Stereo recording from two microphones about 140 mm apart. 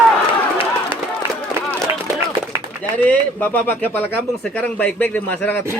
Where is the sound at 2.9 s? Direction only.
10° left (ahead or behind).